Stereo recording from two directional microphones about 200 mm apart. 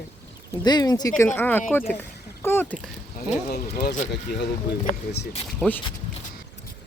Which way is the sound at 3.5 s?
50° left (ahead or behind).